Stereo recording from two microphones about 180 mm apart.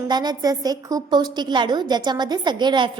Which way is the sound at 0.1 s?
25° right (ahead or behind).